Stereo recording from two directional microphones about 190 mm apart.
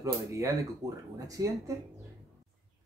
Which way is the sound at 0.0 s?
15° right (ahead or behind).